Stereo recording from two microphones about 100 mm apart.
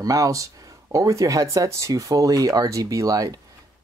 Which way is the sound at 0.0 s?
35° right (ahead or behind).